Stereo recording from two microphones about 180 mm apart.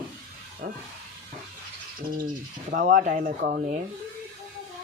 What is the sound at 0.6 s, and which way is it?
Speech, 55° right (ahead or behind).